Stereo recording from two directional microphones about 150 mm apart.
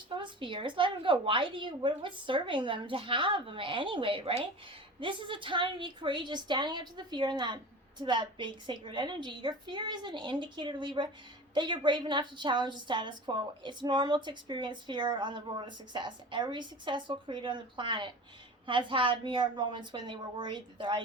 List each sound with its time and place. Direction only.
0.1 s a woman's voice: 35° right (ahead or behind)